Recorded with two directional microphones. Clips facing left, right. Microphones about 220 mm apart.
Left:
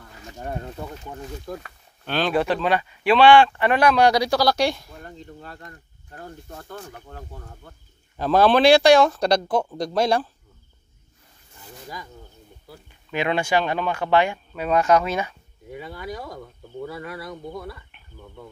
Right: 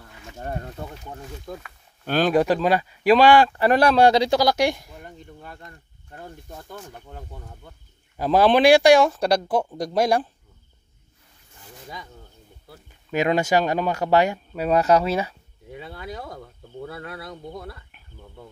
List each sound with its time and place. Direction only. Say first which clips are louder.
2.0 s speech: right 3 dB; 45° right (ahead or behind); by 5.6 s 10° right (ahead or behind)
8.2 s speech: even; 10° right (ahead or behind)
13.1 s speech: right 2 dB; 40° right (ahead or behind)